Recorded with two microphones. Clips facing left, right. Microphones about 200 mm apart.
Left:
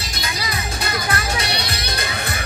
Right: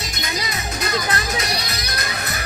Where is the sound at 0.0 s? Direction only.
30° left (ahead or behind).